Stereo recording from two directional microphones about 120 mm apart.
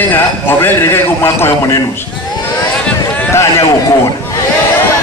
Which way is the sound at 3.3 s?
20° left (ahead or behind).